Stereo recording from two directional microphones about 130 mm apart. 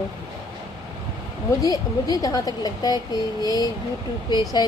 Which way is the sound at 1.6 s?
25° left (ahead or behind).